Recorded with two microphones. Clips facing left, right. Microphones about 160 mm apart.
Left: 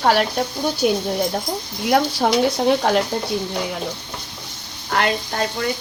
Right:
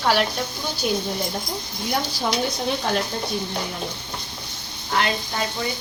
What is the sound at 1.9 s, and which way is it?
Speech, 75° left (ahead or behind).